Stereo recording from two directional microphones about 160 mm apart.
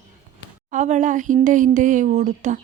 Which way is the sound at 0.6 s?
50° right (ahead or behind).